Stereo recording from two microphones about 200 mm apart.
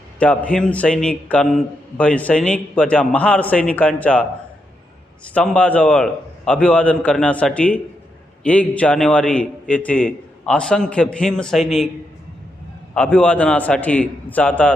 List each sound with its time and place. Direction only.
0.2 s a man's voice: 5° left (ahead or behind)
5.3 s a man's voice: 5° left (ahead or behind)
12.9 s a man's voice: 5° left (ahead or behind)